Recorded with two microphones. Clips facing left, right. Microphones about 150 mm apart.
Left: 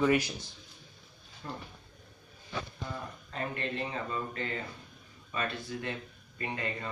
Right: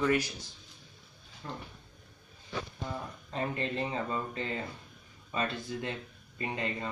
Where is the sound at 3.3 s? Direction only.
30° right (ahead or behind).